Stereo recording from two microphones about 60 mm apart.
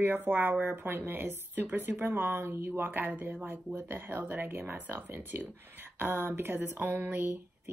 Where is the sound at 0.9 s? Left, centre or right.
Right.